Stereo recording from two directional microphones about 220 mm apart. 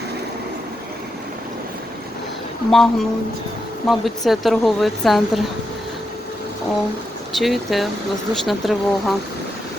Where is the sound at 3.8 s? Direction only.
Centre (ahead or behind).